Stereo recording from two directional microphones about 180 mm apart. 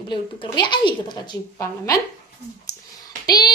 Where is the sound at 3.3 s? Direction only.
20° left (ahead or behind).